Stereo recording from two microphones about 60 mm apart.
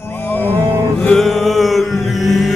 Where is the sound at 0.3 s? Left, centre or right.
Left.